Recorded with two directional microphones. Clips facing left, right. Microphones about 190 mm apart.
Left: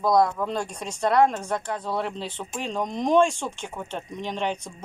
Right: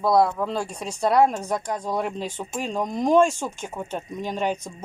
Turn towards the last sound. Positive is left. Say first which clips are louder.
# right 2 dB
turn(degrees=-5)  # may be behind; listen again after turning